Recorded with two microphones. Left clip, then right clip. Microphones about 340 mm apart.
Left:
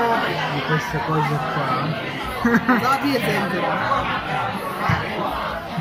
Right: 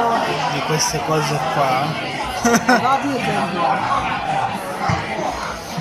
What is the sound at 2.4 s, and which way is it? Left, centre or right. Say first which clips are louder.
Speech: right 3 dB; right.